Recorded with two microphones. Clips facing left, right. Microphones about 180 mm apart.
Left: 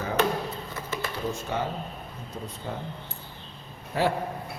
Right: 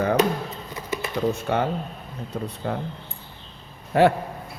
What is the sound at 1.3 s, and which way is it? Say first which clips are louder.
Speech: right 7 dB; 65° right (ahead or behind).